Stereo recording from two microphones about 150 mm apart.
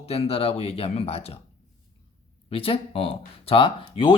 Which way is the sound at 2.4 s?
40° left (ahead or behind).